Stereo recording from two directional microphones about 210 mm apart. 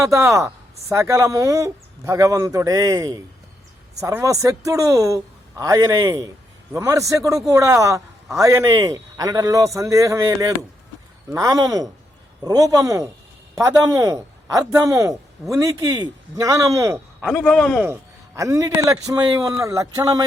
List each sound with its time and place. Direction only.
0.3 s a man's voice: 15° right (ahead or behind)
17.2 s a man's voice: 5° left (ahead or behind)
18.3 s a man's voice: 15° right (ahead or behind)